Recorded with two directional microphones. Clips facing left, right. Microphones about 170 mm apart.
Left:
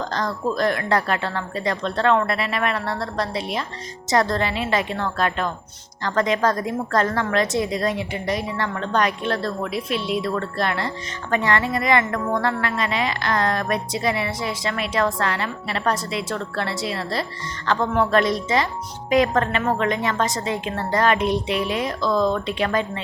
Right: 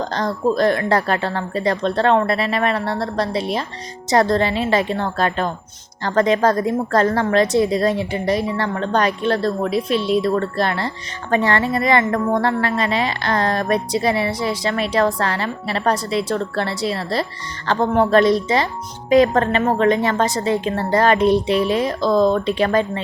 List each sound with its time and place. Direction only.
0.1 s a woman's voice: 25° right (ahead or behind)